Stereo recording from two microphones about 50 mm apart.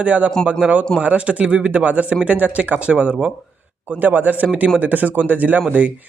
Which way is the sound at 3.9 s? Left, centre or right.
Right.